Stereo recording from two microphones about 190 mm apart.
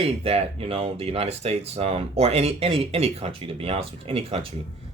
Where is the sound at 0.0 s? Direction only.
30° right (ahead or behind).